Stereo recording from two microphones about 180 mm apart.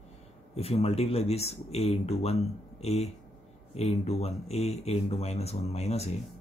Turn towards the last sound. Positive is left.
turn(degrees=35)  # may be behind; listen again after turning